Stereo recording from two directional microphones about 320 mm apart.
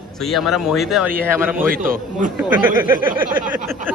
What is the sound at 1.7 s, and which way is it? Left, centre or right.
Speech, right.